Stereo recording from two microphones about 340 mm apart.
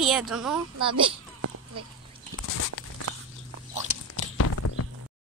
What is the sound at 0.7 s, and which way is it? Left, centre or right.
Speech, centre.